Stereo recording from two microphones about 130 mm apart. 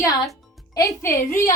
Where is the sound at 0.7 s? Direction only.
20° left (ahead or behind).